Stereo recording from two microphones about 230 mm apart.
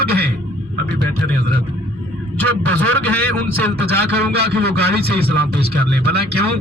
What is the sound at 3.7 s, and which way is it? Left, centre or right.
A man's voice, right.